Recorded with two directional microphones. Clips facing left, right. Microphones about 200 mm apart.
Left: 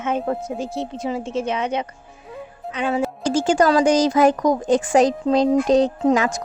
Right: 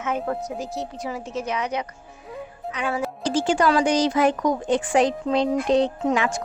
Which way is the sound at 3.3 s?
45° left (ahead or behind).